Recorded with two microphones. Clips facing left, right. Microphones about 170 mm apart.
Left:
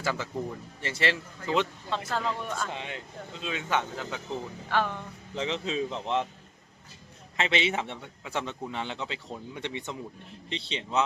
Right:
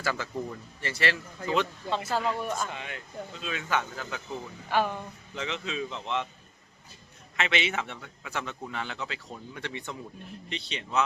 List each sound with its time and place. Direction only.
0.0 s a man's voice: 20° left (ahead or behind)
1.9 s speech: 5° right (ahead or behind)
2.6 s a man's voice: 25° left (ahead or behind)
4.7 s speech: 10° right (ahead or behind)
5.3 s speech: 35° left (ahead or behind)
7.3 s a man's voice: 30° left (ahead or behind)